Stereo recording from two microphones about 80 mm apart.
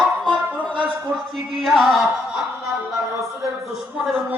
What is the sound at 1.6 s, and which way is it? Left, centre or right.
Music, centre.